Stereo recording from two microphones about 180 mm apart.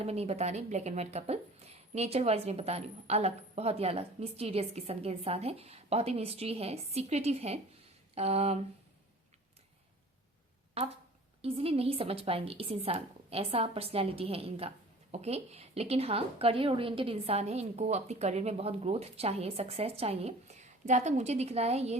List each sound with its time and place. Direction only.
0.0 s speech: 35° right (ahead or behind)
10.8 s speech: 35° right (ahead or behind)